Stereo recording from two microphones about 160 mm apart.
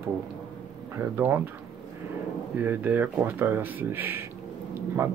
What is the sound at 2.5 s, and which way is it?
Speech, 10° right (ahead or behind).